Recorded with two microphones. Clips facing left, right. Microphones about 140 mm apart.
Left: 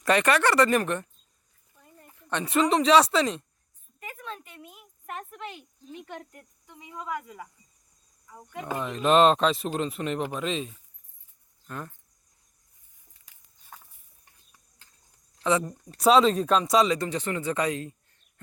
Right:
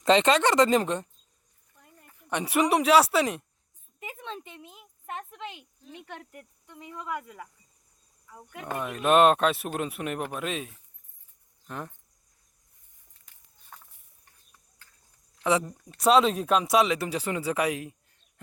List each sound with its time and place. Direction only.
0.0 s speech: 20° right (ahead or behind)
2.1 s speech: 15° right (ahead or behind)
4.0 s speech: 25° right (ahead or behind)
6.8 s speech: centre (ahead or behind)
11.6 s speech: 15° right (ahead or behind)
15.4 s speech: 35° left (ahead or behind)
16.0 s speech: centre (ahead or behind)